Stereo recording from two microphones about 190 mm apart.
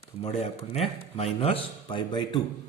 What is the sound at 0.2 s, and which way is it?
Speech, 30° left (ahead or behind).